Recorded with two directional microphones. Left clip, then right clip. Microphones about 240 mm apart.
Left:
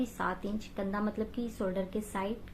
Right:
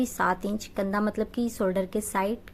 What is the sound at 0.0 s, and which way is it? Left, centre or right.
A woman's voice, right.